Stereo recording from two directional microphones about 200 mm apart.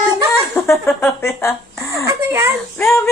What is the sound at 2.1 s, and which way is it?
Speech, 10° right (ahead or behind).